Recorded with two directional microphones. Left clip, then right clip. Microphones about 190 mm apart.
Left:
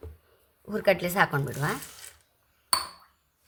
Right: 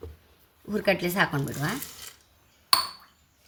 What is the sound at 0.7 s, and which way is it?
A woman's voice, 45° left (ahead or behind).